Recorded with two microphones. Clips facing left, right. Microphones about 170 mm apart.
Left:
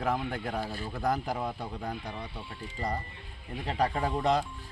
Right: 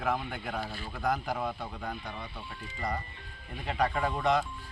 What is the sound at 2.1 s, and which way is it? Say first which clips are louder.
Speech: left 2 dB; 30° left (ahead or behind).